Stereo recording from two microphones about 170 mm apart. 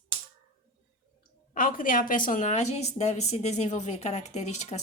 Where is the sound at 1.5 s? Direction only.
55° left (ahead or behind).